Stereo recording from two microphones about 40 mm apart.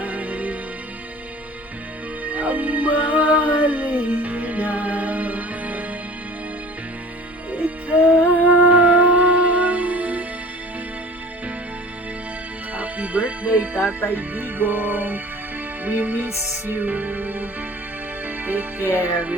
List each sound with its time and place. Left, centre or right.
0.0 s music: right
2.2 s music: right
7.5 s music: right
12.7 s music: right